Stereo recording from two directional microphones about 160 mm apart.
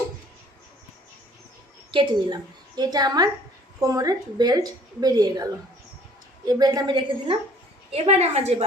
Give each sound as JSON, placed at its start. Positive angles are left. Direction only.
{"t": 1.9, "sound": "a woman's voice", "side_deg": -30}
{"t": 6.5, "sound": "a woman's voice", "side_deg": -25}
{"t": 7.9, "sound": "a woman's voice", "side_deg": -40}